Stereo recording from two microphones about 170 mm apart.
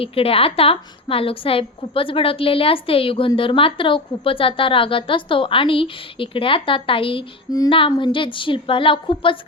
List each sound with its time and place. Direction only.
0.0 s a woman's voice: 35° left (ahead or behind)